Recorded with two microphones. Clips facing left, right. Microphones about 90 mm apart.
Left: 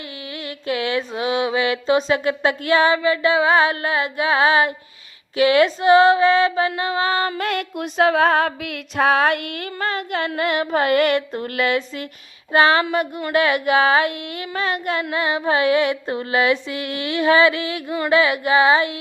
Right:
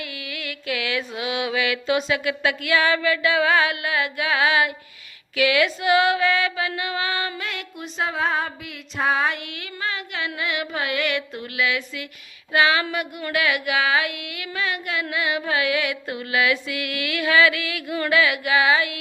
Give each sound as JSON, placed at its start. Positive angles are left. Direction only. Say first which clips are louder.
{"t": 0.3, "sound": "mantra", "louder": "left 5 dB", "side_deg": 30}
{"t": 7.3, "sound": "music", "louder": "left 9 dB", "side_deg": 55}
{"t": 12.5, "sound": "mantra", "louder": "left 4 dB", "side_deg": 40}
{"t": 18.1, "sound": "a sound", "louder": "left 4 dB", "side_deg": 30}